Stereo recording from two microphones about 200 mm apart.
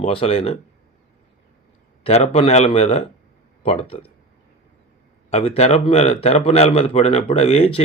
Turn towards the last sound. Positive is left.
turn(degrees=30)  # may be behind; listen again after turning